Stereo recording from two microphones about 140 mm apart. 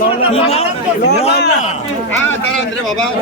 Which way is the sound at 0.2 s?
45° left (ahead or behind).